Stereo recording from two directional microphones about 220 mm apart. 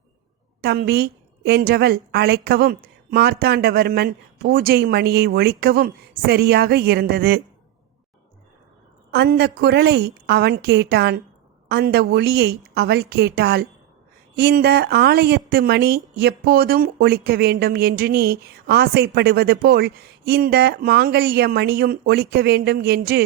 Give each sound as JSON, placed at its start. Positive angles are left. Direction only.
{"t": 0.6, "sound": "speech", "side_deg": -45}
{"t": 9.1, "sound": "speech", "side_deg": -50}